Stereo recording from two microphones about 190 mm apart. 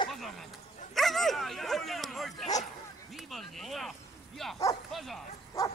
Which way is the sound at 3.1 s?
Centre (ahead or behind).